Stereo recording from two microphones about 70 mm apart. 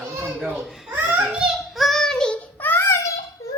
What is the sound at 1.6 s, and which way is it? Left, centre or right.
Child singing, centre.